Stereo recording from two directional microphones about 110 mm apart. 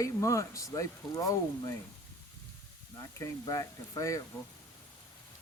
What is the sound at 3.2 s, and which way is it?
Speech, 30° left (ahead or behind).